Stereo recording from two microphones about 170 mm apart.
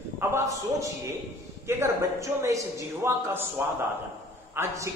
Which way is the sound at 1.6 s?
15° right (ahead or behind).